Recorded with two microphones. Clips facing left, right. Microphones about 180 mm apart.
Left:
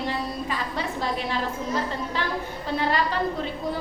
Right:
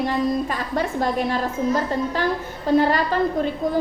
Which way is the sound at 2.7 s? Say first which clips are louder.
Right 6 dB; 45° right (ahead or behind).